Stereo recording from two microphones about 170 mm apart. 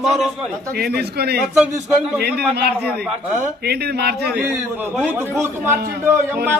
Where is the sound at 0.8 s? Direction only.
70° right (ahead or behind).